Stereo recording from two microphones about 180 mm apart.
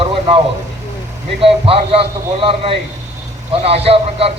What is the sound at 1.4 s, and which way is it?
Speech, 30° right (ahead or behind).